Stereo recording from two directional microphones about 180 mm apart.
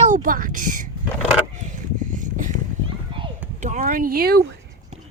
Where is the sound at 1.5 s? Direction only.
45° right (ahead or behind).